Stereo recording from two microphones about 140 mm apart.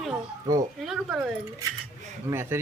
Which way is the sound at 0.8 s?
5° right (ahead or behind).